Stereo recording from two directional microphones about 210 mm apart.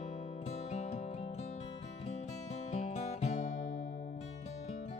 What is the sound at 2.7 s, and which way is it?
Music, 30° left (ahead or behind).